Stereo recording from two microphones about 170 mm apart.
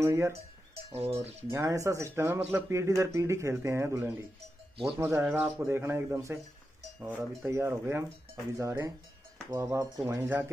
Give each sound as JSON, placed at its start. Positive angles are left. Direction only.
{"t": 0.0, "sound": "speech", "side_deg": -15}
{"t": 0.9, "sound": "speech", "side_deg": -35}
{"t": 1.5, "sound": "speech", "side_deg": -15}